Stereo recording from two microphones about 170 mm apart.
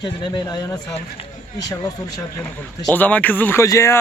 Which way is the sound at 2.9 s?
10° left (ahead or behind).